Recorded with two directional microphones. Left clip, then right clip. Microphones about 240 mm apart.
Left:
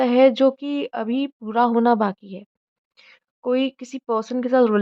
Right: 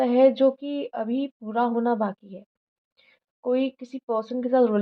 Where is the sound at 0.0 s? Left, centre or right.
Left.